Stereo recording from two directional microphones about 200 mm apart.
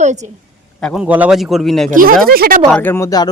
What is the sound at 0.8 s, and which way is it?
A man's voice, 5° right (ahead or behind).